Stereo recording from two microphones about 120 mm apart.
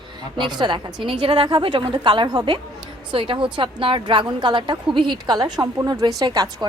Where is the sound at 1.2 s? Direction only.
45° right (ahead or behind).